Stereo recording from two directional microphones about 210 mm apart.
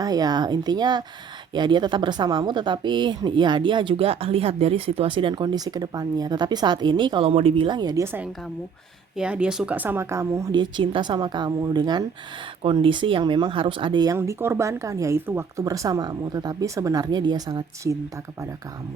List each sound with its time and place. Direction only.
0.0 s speech: 20° right (ahead or behind)